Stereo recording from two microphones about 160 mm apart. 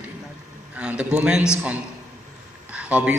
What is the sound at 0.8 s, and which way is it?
Speech, 5° right (ahead or behind).